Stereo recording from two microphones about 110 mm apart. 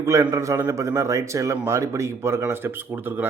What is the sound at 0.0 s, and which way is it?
A man's voice, 30° right (ahead or behind).